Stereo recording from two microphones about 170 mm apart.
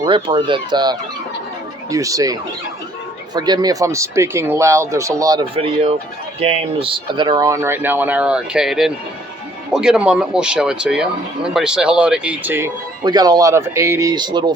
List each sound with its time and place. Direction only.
0.0 s speech: 25° right (ahead or behind)
5.5 s speech: 35° right (ahead or behind); by 12.7 s 15° right (ahead or behind)
13.1 s speech: 25° right (ahead or behind)